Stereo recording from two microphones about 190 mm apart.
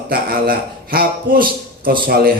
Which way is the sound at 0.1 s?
50° right (ahead or behind).